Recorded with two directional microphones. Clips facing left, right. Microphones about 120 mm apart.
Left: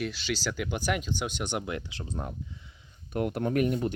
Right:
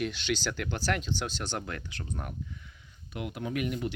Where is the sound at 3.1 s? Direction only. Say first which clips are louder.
Left 7 dB; 45° left (ahead or behind).